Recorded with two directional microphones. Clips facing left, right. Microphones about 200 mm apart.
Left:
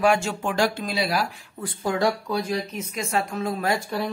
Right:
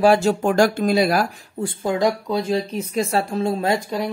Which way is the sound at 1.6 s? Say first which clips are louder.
Right 4 dB; 25° right (ahead or behind).